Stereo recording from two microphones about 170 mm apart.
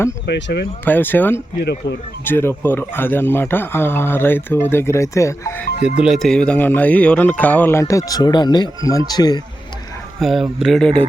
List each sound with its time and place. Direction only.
0.3 s speech: 85° left
0.9 s speech: 10° left (ahead or behind)
1.5 s speech: 85° left
2.2 s speech: 15° left (ahead or behind)
6.0 s speech: centre (ahead or behind); by 9.4 s 25° left (ahead or behind)
10.2 s speech: centre (ahead or behind)